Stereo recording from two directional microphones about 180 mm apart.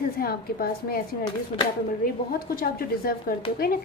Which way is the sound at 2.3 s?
55° left (ahead or behind).